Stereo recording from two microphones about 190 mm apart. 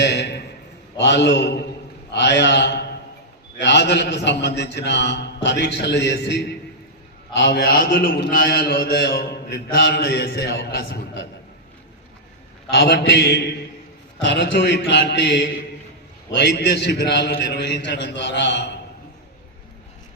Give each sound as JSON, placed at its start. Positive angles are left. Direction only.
{"t": 0.0, "sound": "a sound", "side_deg": 65}
{"t": 0.9, "sound": "a man's voice", "side_deg": 65}
{"t": 12.7, "sound": "a man's voice", "side_deg": 60}